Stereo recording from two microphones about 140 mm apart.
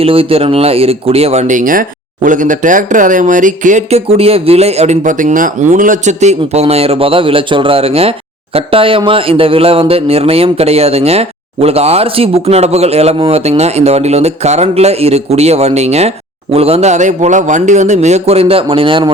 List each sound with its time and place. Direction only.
0.0 s speech: 45° right (ahead or behind)